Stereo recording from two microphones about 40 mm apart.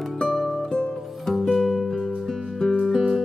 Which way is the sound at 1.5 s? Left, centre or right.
Centre.